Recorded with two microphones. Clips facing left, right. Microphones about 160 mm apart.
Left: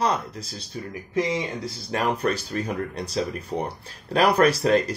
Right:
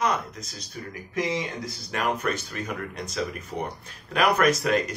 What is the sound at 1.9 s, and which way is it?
Speech, 35° left (ahead or behind).